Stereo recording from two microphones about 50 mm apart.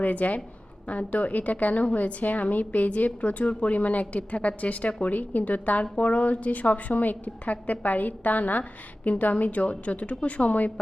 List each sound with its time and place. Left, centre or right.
0.0 s a woman's voice: left